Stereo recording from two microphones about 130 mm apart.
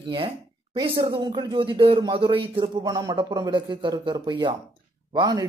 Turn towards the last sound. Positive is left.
turn(degrees=-35)  # may be behind; listen again after turning